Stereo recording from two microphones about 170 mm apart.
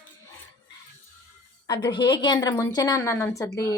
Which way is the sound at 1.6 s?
25° left (ahead or behind).